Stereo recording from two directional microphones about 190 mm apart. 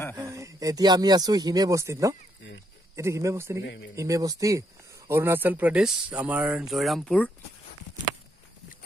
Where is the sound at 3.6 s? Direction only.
65° left (ahead or behind).